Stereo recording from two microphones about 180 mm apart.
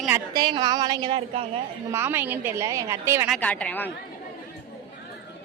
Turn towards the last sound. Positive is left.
turn(degrees=10)  # may be behind; listen again after turning